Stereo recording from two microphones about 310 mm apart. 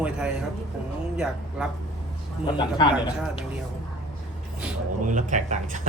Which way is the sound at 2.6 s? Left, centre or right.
Centre.